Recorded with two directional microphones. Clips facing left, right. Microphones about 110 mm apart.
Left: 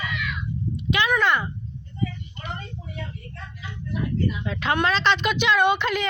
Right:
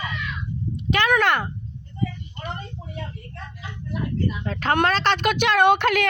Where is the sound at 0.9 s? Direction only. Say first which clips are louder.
Right 2 dB; 60° right (ahead or behind).